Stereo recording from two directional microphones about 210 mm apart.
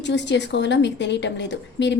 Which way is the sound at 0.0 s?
55° left (ahead or behind).